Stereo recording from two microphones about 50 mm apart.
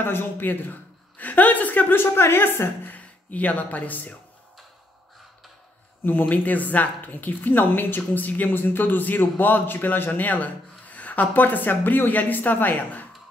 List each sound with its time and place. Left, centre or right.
0.0 s speech: left
2.8 s speech: left
6.0 s a woman's voice: left